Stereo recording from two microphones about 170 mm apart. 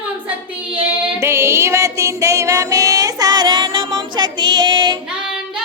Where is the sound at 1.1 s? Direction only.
15° right (ahead or behind).